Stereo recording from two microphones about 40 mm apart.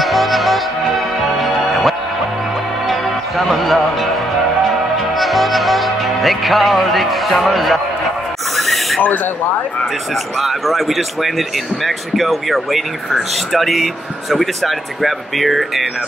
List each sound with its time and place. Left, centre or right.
0.0 s music: centre
5.1 s music: centre
8.5 s a sound: centre
9.0 s speech: left
10.4 s speech: centre